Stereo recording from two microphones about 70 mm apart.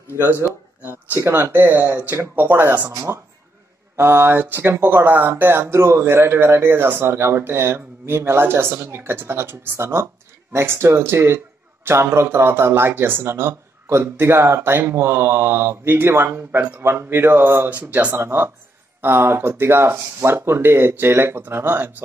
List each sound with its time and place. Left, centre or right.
1.1 s speech: right
3.1 s speech: right
17.6 s speech: right